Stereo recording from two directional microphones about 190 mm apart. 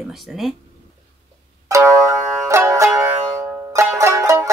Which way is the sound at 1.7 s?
15° right (ahead or behind).